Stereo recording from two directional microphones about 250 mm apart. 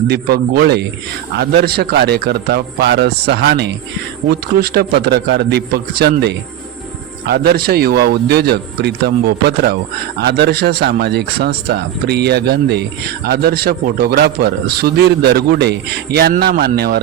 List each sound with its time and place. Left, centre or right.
0.1 s a man's voice: right